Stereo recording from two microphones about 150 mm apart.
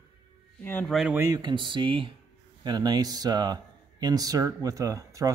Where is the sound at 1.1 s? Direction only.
25° right (ahead or behind).